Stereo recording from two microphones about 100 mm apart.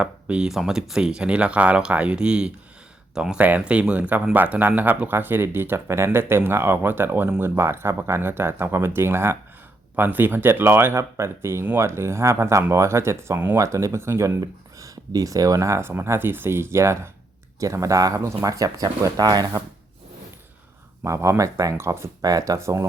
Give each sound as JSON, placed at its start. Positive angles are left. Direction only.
{"t": 0.0, "sound": "speech", "side_deg": -10}
{"t": 21.0, "sound": "speech", "side_deg": -30}
{"t": 22.2, "sound": "speech", "side_deg": -35}